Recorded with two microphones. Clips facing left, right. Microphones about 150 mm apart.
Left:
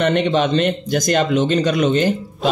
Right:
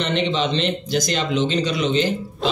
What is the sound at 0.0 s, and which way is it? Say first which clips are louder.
Speech: left 5 dB; 50° left (ahead or behind).